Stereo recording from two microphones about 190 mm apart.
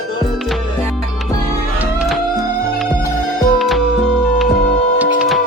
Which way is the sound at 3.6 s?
Centre (ahead or behind).